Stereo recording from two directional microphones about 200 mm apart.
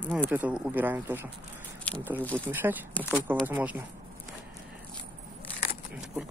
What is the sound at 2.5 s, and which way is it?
Speech, 10° right (ahead or behind).